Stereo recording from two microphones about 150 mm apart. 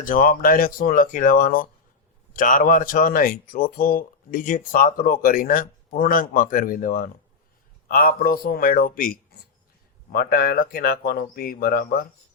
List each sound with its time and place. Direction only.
0.0 s speech: 70° left (ahead or behind)
10.1 s speech: 90° left